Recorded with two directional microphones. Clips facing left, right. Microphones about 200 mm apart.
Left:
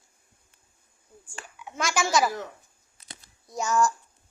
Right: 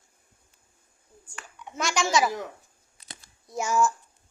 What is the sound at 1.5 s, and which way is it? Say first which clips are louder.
Speech: even; centre (ahead or behind).